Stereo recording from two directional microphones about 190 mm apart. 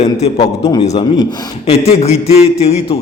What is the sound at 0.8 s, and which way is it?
A man's voice, 35° left (ahead or behind).